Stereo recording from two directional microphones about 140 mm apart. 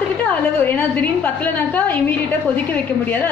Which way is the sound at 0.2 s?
10° left (ahead or behind).